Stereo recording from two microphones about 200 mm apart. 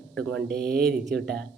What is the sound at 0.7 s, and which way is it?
Speech, 55° right (ahead or behind).